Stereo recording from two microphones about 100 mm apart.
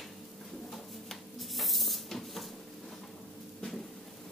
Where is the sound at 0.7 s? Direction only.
Centre (ahead or behind).